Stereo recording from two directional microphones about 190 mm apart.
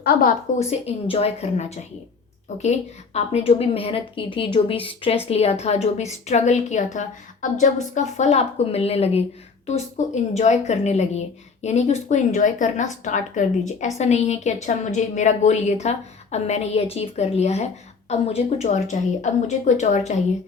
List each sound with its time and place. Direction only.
0.0 s a woman's voice: 50° left (ahead or behind)
0.7 s a woman's voice: 30° left (ahead or behind)